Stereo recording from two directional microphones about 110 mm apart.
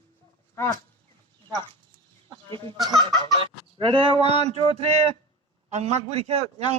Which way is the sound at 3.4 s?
50° right (ahead or behind).